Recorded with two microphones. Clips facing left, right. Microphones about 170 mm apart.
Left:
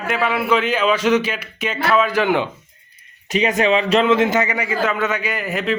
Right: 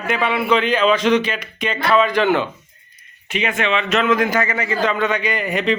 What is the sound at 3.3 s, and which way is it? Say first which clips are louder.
Speech: left 4 dB; 40° left (ahead or behind).